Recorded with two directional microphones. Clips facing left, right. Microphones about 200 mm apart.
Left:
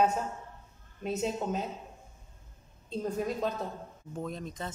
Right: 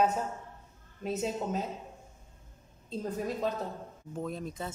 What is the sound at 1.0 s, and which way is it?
Speech, centre (ahead or behind).